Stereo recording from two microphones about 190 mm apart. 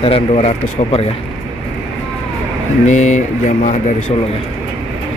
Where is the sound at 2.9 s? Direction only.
40° left (ahead or behind).